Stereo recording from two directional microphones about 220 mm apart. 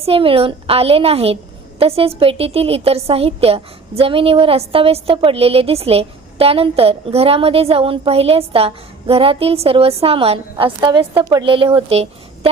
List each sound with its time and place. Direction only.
0.0 s a woman's voice: 25° right (ahead or behind)